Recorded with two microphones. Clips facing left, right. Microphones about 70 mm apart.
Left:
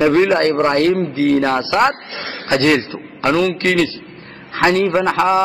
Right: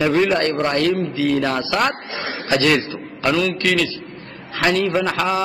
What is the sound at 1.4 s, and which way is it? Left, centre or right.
Speech, left.